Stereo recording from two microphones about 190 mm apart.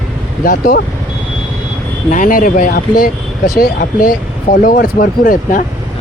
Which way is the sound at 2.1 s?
45° left (ahead or behind).